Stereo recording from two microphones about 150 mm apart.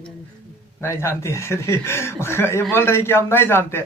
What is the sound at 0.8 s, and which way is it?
Speech, 15° left (ahead or behind).